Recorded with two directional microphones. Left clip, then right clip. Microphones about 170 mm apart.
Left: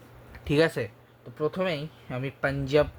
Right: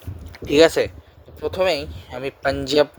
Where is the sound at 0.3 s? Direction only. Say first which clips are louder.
Right 10 dB; 45° right (ahead or behind).